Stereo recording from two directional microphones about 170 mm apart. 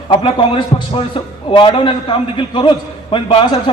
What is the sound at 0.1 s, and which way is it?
A man's voice, 30° left (ahead or behind).